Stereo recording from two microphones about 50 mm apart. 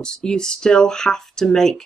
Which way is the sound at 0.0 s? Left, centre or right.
Centre.